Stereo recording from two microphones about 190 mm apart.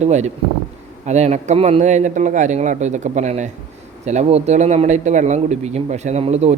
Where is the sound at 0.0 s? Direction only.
35° right (ahead or behind).